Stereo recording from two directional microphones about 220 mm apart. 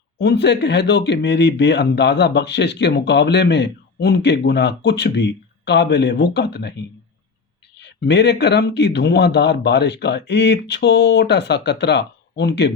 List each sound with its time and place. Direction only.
0.2 s speech: 50° left (ahead or behind)
7.8 s speech: 50° left (ahead or behind)